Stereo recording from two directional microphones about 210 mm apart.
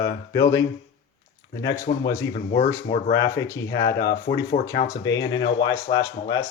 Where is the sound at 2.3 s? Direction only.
30° left (ahead or behind).